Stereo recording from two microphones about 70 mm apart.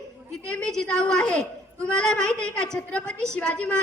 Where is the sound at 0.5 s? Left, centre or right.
Centre.